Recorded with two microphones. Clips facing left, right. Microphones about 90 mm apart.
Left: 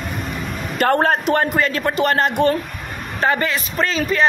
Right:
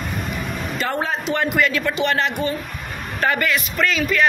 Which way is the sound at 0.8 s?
55° left (ahead or behind).